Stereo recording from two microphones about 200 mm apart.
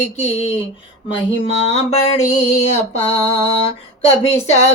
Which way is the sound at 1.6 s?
30° left (ahead or behind).